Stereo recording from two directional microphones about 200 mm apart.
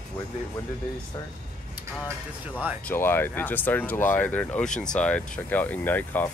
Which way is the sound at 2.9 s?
10° left (ahead or behind).